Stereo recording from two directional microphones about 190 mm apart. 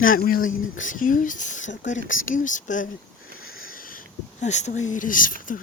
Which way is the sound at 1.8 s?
85° left.